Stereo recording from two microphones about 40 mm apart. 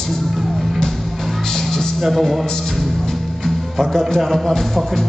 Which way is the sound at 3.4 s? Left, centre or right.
Centre.